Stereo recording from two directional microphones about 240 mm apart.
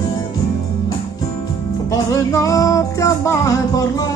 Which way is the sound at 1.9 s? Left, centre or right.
Centre.